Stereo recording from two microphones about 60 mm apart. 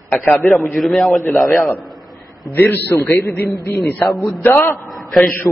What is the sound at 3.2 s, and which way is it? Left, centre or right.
Speech, left.